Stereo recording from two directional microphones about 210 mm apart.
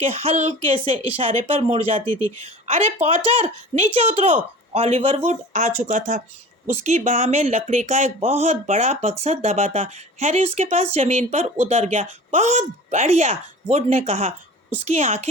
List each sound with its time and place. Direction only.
0.0 s speech: 30° right (ahead or behind)